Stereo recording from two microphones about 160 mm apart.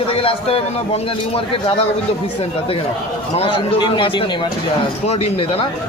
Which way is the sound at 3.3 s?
35° left (ahead or behind).